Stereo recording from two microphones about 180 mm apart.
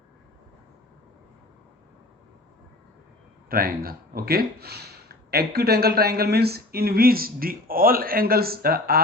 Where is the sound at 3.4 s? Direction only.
55° right (ahead or behind).